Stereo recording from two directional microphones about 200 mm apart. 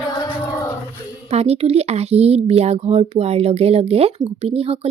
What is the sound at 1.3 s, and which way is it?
Speech, 30° right (ahead or behind).